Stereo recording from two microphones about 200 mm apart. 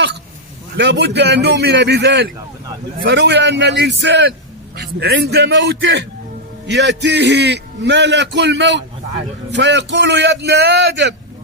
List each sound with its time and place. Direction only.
0.7 s a man's voice: 60° right (ahead or behind)